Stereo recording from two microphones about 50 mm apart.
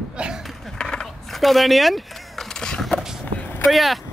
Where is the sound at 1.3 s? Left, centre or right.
Centre.